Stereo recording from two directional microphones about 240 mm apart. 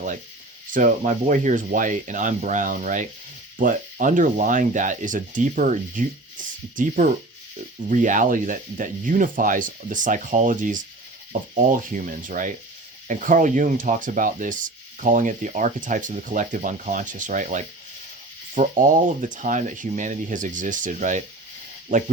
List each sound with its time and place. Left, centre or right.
0.7 s speech: right